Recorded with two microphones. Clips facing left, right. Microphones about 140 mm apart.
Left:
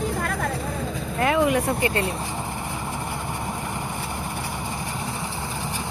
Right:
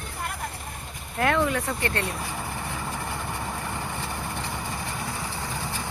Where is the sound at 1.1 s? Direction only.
Centre (ahead or behind).